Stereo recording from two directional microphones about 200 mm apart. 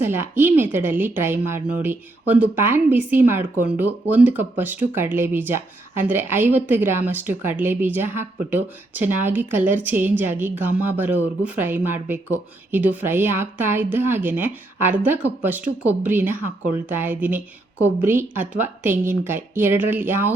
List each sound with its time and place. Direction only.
0.0 s a woman's voice: 10° right (ahead or behind)